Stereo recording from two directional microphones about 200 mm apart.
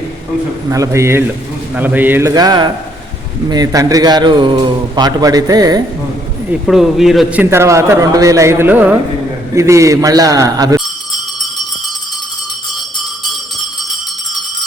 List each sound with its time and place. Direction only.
0.7 s a man's voice: 15° right (ahead or behind)
6.5 s a man's voice: centre (ahead or behind)